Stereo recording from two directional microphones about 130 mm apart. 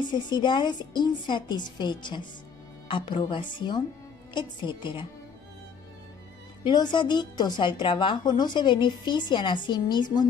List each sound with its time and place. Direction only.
0.0 s a woman's voice: 35° left (ahead or behind)
6.6 s a woman's voice: 35° left (ahead or behind)